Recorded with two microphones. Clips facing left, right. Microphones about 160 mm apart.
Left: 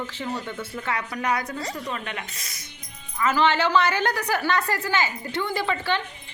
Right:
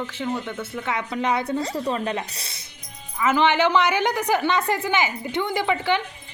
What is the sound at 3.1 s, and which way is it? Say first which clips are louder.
A woman's voice: right 2 dB; 15° right (ahead or behind).